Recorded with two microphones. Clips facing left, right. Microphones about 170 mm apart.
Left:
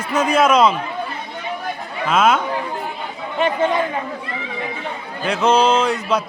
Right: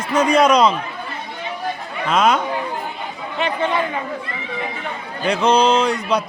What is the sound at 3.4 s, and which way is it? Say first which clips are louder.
Speech: left 3 dB; 45° left (ahead or behind).